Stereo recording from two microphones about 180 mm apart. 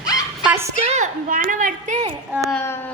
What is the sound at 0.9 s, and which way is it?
A woman's voice, 40° right (ahead or behind).